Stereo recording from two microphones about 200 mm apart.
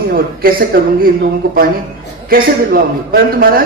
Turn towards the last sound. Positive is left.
turn(degrees=-45)  # may be behind; listen again after turning